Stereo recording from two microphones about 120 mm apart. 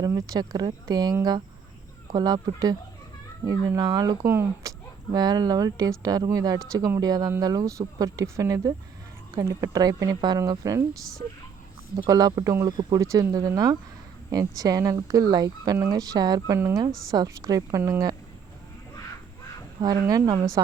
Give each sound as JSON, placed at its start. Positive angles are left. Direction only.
{"t": 0.0, "sound": "speech", "side_deg": -30}
{"t": 3.8, "sound": "speech", "side_deg": -35}
{"t": 4.3, "sound": "speech", "side_deg": -20}
{"t": 5.1, "sound": "speech", "side_deg": -35}
{"t": 11.9, "sound": "speech", "side_deg": -30}
{"t": 19.8, "sound": "speech", "side_deg": -30}